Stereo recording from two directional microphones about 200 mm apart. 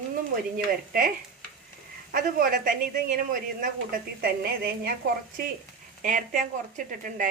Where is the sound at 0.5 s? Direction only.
45° right (ahead or behind).